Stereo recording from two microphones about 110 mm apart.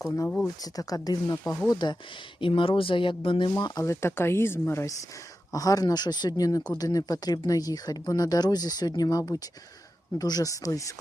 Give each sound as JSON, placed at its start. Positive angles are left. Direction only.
{"t": 0.4, "sound": "speech", "side_deg": 35}
{"t": 2.4, "sound": "speech", "side_deg": 55}
{"t": 3.8, "sound": "speech", "side_deg": 20}